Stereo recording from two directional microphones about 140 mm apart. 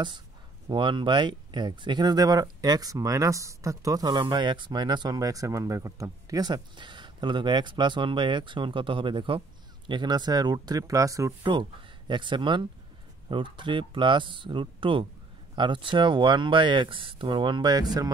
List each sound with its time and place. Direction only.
0.7 s speech: 35° right (ahead or behind)
12.1 s speech: 35° right (ahead or behind)